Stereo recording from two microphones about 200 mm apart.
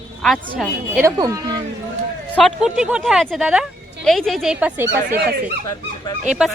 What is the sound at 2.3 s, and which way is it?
Speech, centre (ahead or behind).